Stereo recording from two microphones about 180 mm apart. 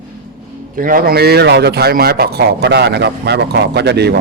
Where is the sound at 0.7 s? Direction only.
50° right (ahead or behind); by 4.2 s 65° right (ahead or behind).